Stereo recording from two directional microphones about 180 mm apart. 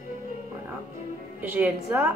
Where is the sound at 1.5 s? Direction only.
10° right (ahead or behind).